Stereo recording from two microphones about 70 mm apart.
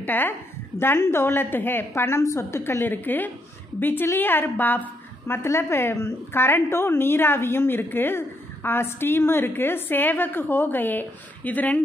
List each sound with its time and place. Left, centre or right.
0.0 s a woman's voice: left